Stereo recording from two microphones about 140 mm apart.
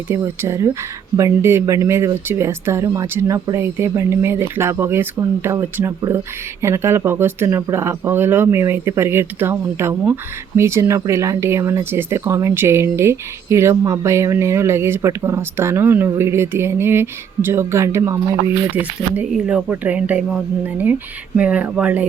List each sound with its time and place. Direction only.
0.1 s speech: 20° right (ahead or behind)